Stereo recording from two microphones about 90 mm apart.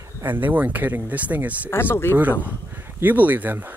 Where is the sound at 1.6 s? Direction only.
25° left (ahead or behind).